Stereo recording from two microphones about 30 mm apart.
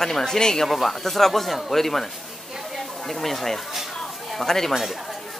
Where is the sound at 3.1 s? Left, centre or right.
Centre.